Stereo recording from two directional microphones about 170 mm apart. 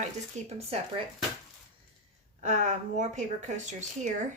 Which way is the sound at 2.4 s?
45° right (ahead or behind).